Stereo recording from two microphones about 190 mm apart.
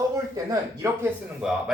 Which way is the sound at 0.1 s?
15° right (ahead or behind).